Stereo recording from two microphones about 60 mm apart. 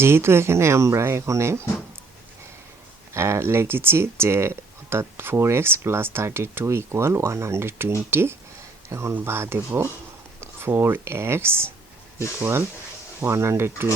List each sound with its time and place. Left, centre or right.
0.0 s speech: right
3.2 s speech: right
8.9 s speech: right
9.2 s speech: right